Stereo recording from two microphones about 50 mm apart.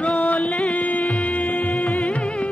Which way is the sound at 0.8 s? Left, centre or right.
Left.